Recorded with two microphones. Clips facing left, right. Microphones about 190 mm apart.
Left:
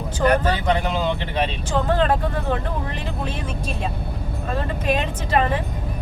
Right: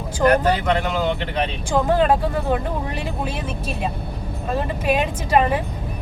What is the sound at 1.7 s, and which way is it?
Speech, 10° right (ahead or behind).